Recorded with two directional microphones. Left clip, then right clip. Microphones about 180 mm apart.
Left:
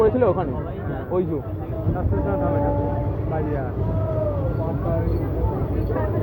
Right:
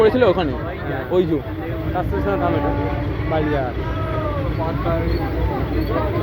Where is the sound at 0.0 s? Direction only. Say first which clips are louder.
Right 4 dB; 15° right (ahead or behind).